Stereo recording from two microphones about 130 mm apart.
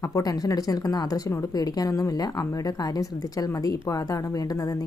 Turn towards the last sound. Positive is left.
turn(degrees=30)  # may be behind; listen again after turning